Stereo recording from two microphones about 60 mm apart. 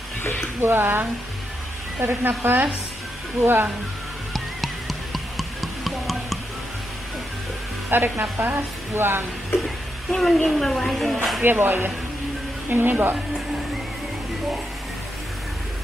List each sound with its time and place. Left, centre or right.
0.2 s a sound: left
0.6 s a woman's voice: right
4.3 s music: centre
7.9 s a woman's voice: right
10.1 s a woman's voice: centre
11.4 s a woman's voice: right